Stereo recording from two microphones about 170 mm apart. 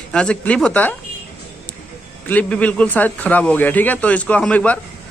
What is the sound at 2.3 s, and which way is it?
A man's voice, 10° left (ahead or behind).